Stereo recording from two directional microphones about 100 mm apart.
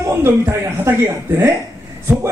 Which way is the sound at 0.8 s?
25° right (ahead or behind).